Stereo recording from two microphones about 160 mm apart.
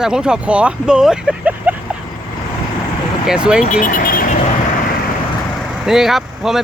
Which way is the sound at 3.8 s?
60° left (ahead or behind).